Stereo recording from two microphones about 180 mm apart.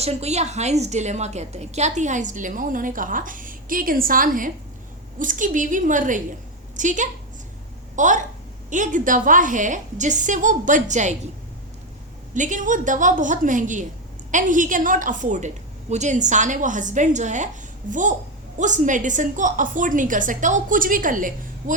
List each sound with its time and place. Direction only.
0.0 s a woman's voice: 35° right (ahead or behind)
12.3 s a woman's voice: 45° right (ahead or behind)